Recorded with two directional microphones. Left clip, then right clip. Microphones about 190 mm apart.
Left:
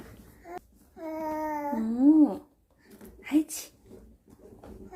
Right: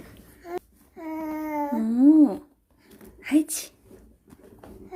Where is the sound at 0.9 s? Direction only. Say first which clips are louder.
Right 1 dB; 45° right (ahead or behind).